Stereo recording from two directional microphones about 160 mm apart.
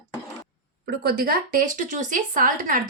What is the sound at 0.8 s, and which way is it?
A woman's voice, 75° right (ahead or behind).